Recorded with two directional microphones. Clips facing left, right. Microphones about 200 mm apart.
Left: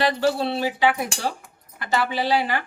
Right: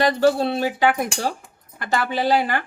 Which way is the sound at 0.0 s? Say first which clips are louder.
Right 4 dB; 45° right (ahead or behind).